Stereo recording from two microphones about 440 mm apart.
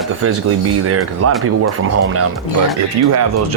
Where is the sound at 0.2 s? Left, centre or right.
Right.